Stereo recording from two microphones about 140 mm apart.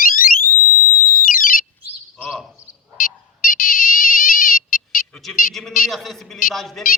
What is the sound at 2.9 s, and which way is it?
Ringtone, 85° left.